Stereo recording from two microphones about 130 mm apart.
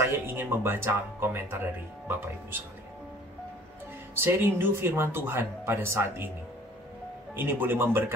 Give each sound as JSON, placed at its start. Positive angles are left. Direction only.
{"t": 0.0, "sound": "speech", "side_deg": -20}
{"t": 4.1, "sound": "speech", "side_deg": -15}
{"t": 7.3, "sound": "speech", "side_deg": -15}